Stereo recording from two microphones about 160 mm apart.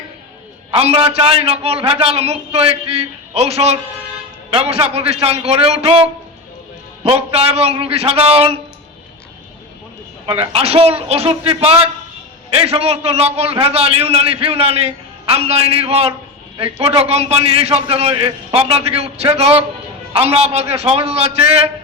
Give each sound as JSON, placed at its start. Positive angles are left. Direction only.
{"t": 0.8, "sound": "a man's voice", "side_deg": -35}
{"t": 7.1, "sound": "a man's voice", "side_deg": -35}
{"t": 10.2, "sound": "a man's voice", "side_deg": -35}